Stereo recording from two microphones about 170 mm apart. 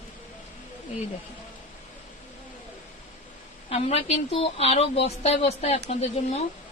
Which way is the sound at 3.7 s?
35° left (ahead or behind).